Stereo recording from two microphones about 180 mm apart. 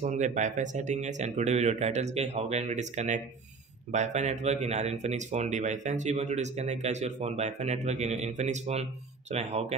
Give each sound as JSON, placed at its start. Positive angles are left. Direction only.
{"t": 0.0, "sound": "speech", "side_deg": -45}